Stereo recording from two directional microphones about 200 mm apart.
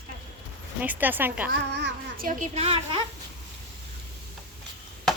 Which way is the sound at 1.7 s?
55° right (ahead or behind).